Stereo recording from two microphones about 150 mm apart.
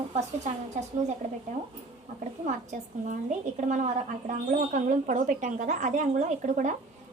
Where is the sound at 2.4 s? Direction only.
55° right (ahead or behind).